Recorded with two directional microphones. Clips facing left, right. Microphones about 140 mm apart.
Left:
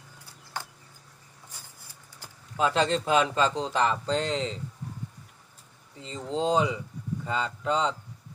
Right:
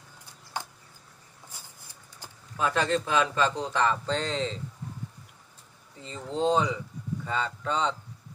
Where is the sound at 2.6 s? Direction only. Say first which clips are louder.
Left 2 dB; 20° left (ahead or behind).